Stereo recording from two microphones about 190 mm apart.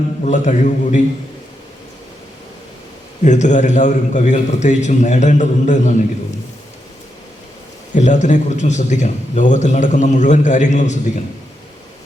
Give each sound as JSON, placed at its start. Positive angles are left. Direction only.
{"t": 0.3, "sound": "a man's voice", "side_deg": 40}
{"t": 3.2, "sound": "a man's voice", "side_deg": 40}
{"t": 7.9, "sound": "a man's voice", "side_deg": 40}